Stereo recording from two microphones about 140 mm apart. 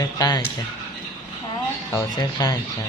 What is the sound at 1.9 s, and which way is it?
Speech, 30° left (ahead or behind).